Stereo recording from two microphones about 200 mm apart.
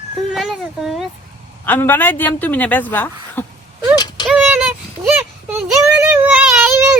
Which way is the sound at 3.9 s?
20° left (ahead or behind).